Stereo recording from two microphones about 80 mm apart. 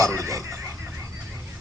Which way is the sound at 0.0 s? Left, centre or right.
Right.